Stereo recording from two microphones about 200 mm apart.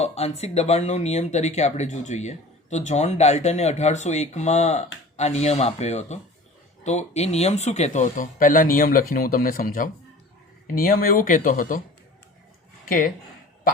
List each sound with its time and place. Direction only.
0.0 s speech: 30° left (ahead or behind)
12.8 s speech: 45° left (ahead or behind)